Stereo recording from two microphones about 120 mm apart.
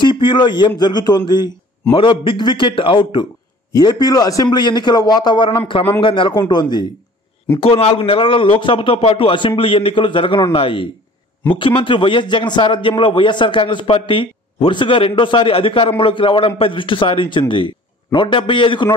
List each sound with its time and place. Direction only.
0.0 s a man's voice: 40° left (ahead or behind)
7.6 s a man's voice: 50° left (ahead or behind)